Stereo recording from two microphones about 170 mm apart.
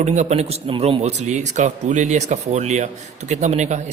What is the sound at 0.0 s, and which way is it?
A man's voice, 45° right (ahead or behind).